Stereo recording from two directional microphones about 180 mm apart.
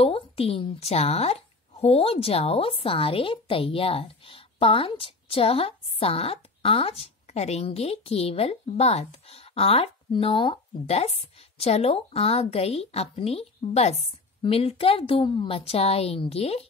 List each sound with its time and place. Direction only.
0.0 s a woman's voice: 30° left (ahead or behind)